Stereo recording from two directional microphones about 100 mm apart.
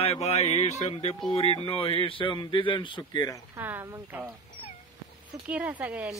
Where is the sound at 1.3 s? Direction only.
75° left (ahead or behind); by 3.3 s 45° left (ahead or behind).